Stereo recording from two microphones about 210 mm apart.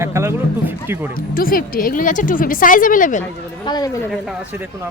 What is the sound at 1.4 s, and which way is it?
Speech, 45° left (ahead or behind).